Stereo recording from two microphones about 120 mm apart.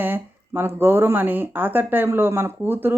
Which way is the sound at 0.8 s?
20° right (ahead or behind).